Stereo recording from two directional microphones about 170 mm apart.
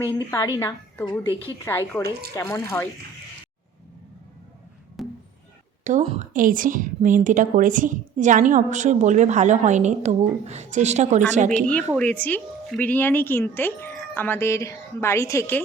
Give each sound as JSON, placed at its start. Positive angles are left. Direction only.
{"t": 0.3, "sound": "speech", "side_deg": 20}
{"t": 5.0, "sound": "a sound", "side_deg": 0}
{"t": 5.8, "sound": "a woman's voice", "side_deg": -40}
{"t": 11.9, "sound": "speech", "side_deg": 10}